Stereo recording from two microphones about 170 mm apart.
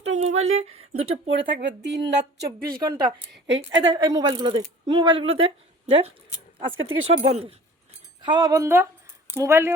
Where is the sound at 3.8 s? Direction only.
25° right (ahead or behind).